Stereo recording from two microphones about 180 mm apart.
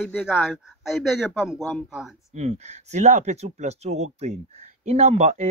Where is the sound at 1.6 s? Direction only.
10° left (ahead or behind).